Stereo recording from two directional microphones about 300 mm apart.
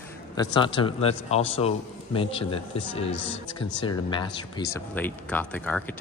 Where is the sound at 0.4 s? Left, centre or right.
Centre.